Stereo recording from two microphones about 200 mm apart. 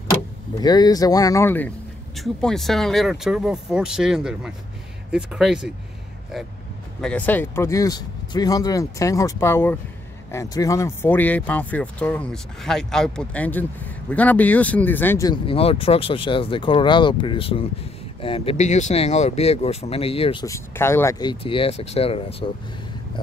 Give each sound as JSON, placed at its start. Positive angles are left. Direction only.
{"t": 0.1, "sound": "speech", "side_deg": 20}
{"t": 7.0, "sound": "speech", "side_deg": 5}
{"t": 15.4, "sound": "speech", "side_deg": 30}
{"t": 20.4, "sound": "speech", "side_deg": 15}